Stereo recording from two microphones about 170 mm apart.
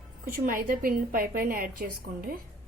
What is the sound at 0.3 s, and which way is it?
A woman's voice, 55° right (ahead or behind).